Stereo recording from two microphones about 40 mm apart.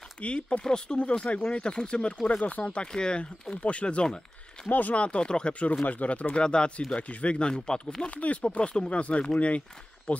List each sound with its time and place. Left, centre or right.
0.2 s speech: left
4.6 s speech: left
4.9 s speech: left
5.5 s speech: left
6.4 s speech: left
7.0 s speech: left; by 8.1 s centre
8.1 s speech: left